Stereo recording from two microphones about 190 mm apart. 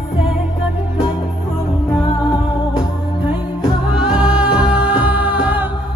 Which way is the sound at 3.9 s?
5° right (ahead or behind).